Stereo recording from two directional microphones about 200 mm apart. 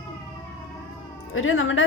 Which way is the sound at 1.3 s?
85° left.